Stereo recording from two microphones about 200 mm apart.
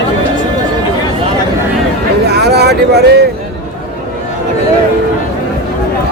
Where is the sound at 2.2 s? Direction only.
55° right (ahead or behind).